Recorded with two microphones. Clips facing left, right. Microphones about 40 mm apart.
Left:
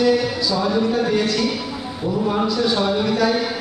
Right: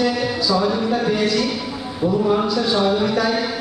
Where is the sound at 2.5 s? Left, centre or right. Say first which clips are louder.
Right 1 dB; centre.